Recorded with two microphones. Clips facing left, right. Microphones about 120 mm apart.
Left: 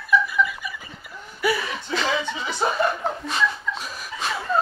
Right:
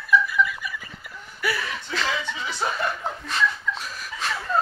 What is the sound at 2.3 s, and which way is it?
Chuckle, 30° left (ahead or behind).